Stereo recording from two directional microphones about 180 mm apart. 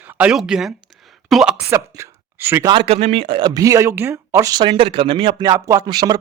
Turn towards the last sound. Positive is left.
turn(degrees=-20)  # may be behind; listen again after turning